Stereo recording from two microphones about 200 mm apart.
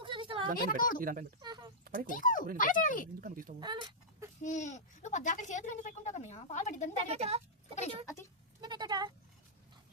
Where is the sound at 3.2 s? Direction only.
45° right (ahead or behind).